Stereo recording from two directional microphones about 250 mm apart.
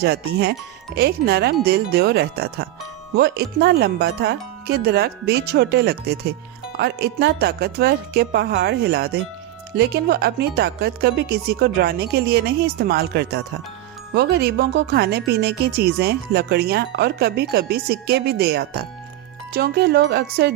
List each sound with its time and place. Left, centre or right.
0.0 s speech: right